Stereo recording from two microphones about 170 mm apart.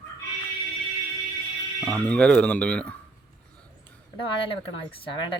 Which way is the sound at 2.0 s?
5° left (ahead or behind).